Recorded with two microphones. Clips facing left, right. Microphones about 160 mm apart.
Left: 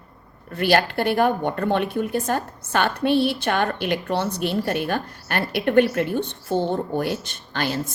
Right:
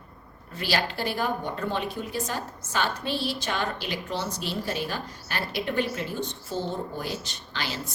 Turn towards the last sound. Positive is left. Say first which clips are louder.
# left 8 dB
turn(degrees=50)  # may be behind; listen again after turning